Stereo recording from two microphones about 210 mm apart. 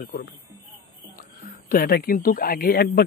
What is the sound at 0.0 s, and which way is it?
Speech, 45° left (ahead or behind).